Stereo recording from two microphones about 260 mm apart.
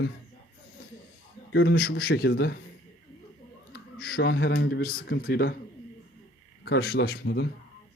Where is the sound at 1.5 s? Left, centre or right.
Left.